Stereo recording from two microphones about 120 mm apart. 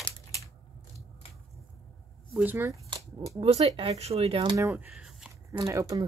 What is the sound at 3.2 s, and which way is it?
Speech, 55° right (ahead or behind).